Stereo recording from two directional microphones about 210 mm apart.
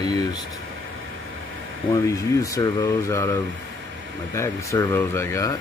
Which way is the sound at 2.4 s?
15° left (ahead or behind).